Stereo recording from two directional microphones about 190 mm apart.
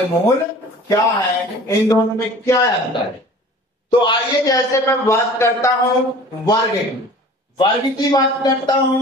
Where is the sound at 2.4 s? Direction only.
15° left (ahead or behind).